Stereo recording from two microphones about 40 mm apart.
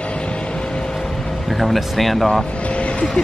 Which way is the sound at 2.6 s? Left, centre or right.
Left.